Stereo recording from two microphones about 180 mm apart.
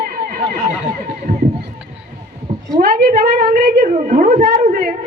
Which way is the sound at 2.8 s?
55° right (ahead or behind).